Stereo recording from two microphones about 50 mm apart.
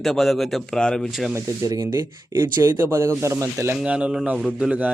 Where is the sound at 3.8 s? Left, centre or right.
Right.